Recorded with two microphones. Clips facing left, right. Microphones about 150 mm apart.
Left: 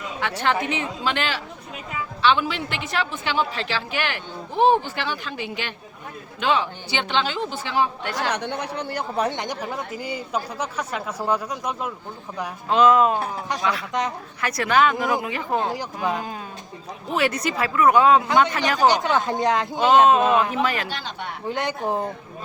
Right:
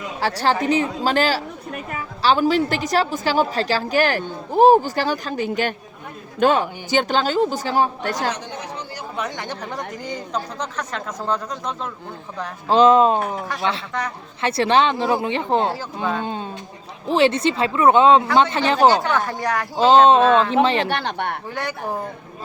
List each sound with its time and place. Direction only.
0.2 s a woman's voice: 35° right (ahead or behind)
8.3 s speech: 60° left (ahead or behind)
9.1 s speech: 30° left (ahead or behind)
9.4 s speech: 10° left (ahead or behind)
12.6 s speech: 30° right (ahead or behind)
19.0 s speech: 20° left (ahead or behind)
20.1 s speech: 30° right (ahead or behind)
20.8 s speech: 60° right (ahead or behind)
21.5 s speech: 20° left (ahead or behind)